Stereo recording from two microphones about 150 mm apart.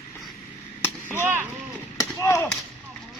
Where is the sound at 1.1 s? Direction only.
15° right (ahead or behind).